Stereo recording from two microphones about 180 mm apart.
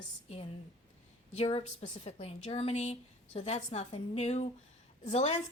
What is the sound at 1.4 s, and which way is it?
A woman's voice, 35° left (ahead or behind).